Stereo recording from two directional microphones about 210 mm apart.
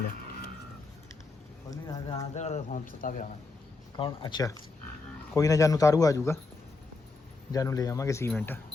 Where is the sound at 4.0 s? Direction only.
25° left (ahead or behind).